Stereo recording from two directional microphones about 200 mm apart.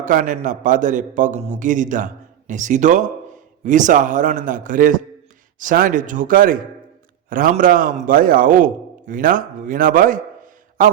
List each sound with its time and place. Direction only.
0.0 s a man's voice: 40° right (ahead or behind)